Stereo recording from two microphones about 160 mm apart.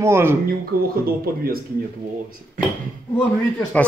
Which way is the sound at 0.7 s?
70° right (ahead or behind).